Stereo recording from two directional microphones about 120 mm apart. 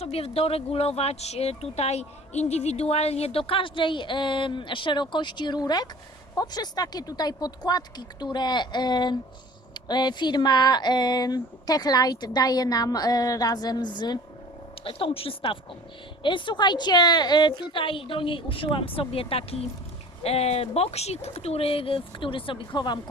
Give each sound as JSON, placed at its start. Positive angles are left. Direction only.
{"t": 0.0, "sound": "speech", "side_deg": 55}
{"t": 14.8, "sound": "speech", "side_deg": 50}